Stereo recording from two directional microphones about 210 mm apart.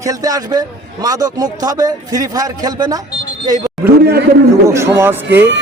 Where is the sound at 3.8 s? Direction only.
50° right (ahead or behind).